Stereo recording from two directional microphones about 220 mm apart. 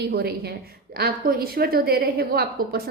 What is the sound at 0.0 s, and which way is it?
A woman's voice, 45° right (ahead or behind).